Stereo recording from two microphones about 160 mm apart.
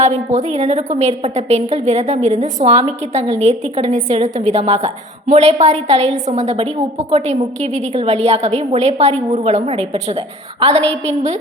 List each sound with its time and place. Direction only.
0.0 s a woman's voice: 50° right (ahead or behind)